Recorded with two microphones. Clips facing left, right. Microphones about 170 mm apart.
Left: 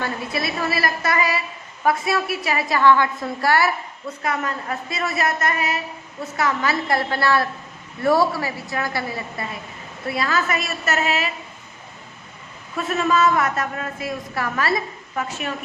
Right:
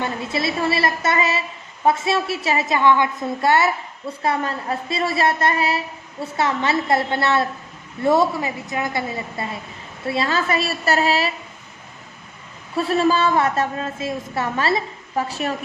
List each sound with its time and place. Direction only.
0.0 s a woman's voice: 25° right (ahead or behind)
12.7 s a woman's voice: 35° right (ahead or behind)